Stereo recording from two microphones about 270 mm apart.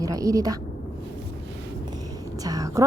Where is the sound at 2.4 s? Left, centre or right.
Centre.